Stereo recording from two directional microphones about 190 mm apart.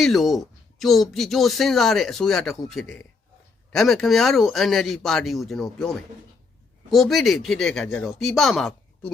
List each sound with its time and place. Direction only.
0.0 s speech: centre (ahead or behind)